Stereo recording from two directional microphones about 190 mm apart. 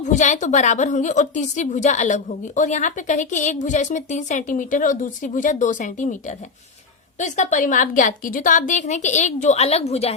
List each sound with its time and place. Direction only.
0.0 s a woman's voice: 40° left (ahead or behind)